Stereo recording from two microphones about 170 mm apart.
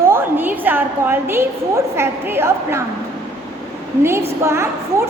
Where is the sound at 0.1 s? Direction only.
10° right (ahead or behind).